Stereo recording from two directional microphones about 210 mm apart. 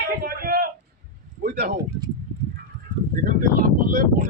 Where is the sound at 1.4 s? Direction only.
50° right (ahead or behind).